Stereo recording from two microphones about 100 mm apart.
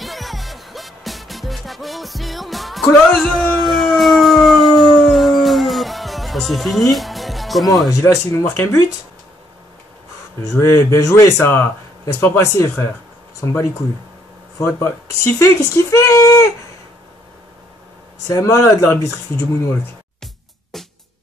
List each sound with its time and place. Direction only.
0.0 s music: centre (ahead or behind)
3.0 s howl: centre (ahead or behind)
8.0 s speech: 30° left (ahead or behind)
10.6 s speech: 30° left (ahead or behind)
14.8 s speech: 25° left (ahead or behind)
18.3 s speech: 30° left (ahead or behind)
20.7 s music: centre (ahead or behind)